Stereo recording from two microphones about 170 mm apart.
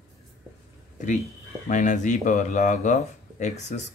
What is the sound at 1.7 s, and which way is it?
Speech, 45° left (ahead or behind).